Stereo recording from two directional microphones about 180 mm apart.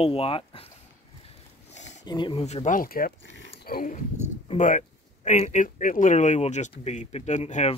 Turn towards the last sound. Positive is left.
turn(degrees=40)  # may be behind; listen again after turning